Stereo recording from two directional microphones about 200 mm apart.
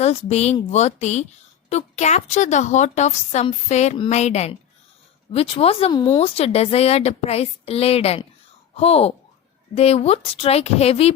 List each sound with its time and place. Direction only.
0.0 s speech: 30° left (ahead or behind)